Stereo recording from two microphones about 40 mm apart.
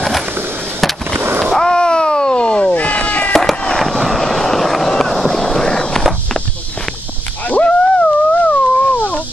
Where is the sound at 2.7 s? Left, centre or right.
Left.